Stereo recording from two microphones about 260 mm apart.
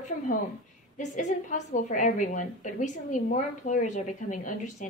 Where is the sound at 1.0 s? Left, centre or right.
Left.